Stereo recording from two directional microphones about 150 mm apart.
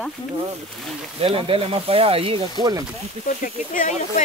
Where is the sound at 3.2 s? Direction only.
60° left (ahead or behind).